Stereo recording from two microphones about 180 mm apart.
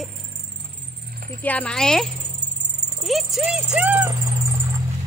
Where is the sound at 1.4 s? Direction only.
5° left (ahead or behind).